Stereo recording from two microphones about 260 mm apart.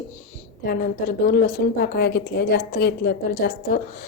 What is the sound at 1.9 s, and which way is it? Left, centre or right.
A woman's voice, left.